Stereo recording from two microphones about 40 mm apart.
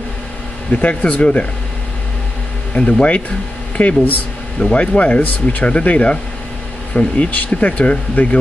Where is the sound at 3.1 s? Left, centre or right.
Left.